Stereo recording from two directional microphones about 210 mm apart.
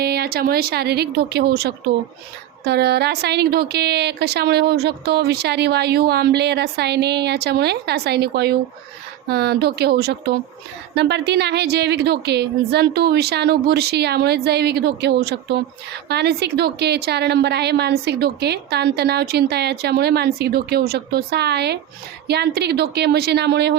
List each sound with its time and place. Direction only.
0.0 s a woman's voice: 50° right (ahead or behind)